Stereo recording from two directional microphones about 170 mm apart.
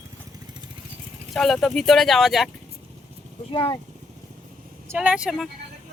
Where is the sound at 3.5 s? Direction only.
30° left (ahead or behind).